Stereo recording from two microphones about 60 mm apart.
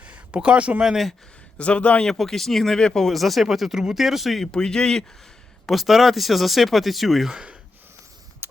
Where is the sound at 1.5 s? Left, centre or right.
Centre.